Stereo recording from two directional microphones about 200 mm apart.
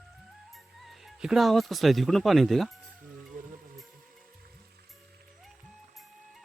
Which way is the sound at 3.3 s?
40° right (ahead or behind).